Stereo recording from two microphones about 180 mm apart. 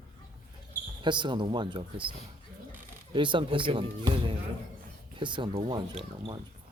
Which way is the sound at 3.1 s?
25° right (ahead or behind).